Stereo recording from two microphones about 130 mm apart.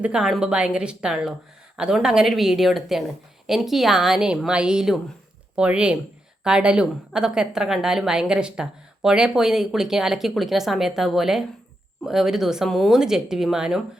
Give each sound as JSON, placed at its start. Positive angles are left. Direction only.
{"t": 0.0, "sound": "a woman's voice", "side_deg": -5}